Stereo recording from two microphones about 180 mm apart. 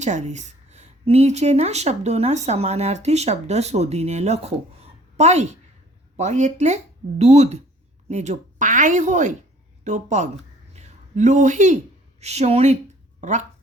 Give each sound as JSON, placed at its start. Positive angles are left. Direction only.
{"t": 0.0, "sound": "a woman's voice", "side_deg": -40}
{"t": 10.8, "sound": "a sound", "side_deg": -40}
{"t": 12.2, "sound": "speech", "side_deg": -35}